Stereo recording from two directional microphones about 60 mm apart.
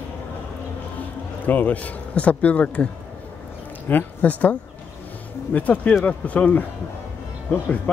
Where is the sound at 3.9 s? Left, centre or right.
Left.